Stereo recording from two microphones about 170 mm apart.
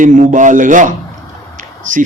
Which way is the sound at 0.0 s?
50° right (ahead or behind).